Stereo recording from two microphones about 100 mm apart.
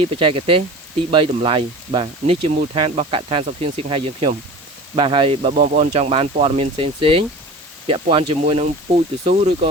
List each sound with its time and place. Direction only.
0.0 s speech: 65° right (ahead or behind); by 9.6 s 90° right